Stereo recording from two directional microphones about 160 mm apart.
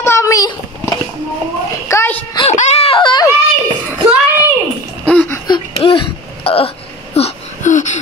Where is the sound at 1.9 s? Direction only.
15° left (ahead or behind).